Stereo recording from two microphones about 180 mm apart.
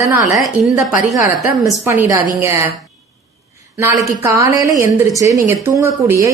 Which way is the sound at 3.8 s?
15° right (ahead or behind).